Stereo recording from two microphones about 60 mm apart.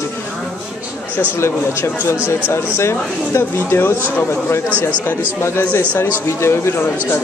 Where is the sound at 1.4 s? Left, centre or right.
Left.